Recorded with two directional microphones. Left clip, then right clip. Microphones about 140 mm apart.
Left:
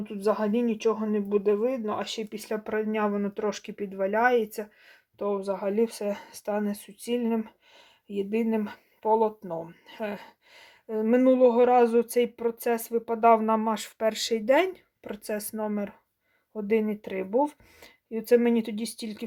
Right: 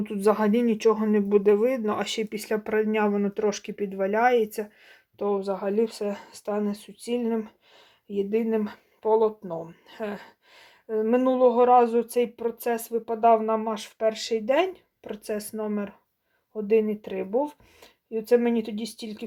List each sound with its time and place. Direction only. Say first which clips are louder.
0.0 s speech: right 4 dB; 30° right (ahead or behind); by 19.2 s 25° left (ahead or behind)